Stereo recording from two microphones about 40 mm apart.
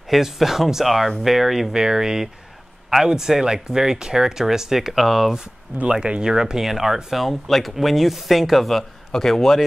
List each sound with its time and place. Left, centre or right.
0.1 s speech: centre
1.8 s speech: centre
5.9 s speech: right; by 9.6 s centre